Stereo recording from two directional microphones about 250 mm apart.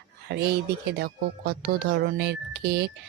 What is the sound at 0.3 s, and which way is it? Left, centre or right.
Speech, right.